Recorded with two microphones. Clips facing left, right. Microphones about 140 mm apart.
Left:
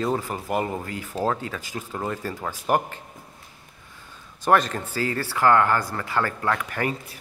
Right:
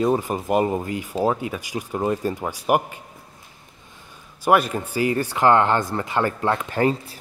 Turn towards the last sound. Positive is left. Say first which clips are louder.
# right 5 dB
turn(degrees=-25)  # may be behind; listen again after turning